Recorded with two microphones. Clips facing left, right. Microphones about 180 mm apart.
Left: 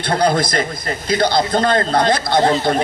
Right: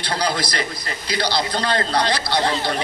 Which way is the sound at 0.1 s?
50° left (ahead or behind).